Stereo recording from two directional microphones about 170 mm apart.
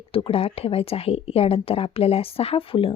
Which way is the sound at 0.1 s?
35° left (ahead or behind).